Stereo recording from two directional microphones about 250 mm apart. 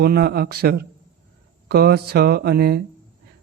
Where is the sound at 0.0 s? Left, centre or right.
Right.